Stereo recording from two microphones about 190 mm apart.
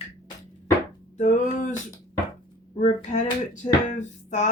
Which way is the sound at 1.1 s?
40° left (ahead or behind).